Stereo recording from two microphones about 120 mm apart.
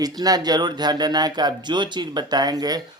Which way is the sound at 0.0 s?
30° right (ahead or behind).